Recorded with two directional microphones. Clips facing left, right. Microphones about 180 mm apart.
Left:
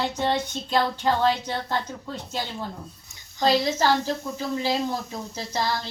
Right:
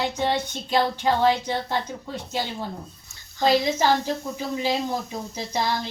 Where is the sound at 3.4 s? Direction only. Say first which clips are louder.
Right 1 dB; 10° right (ahead or behind).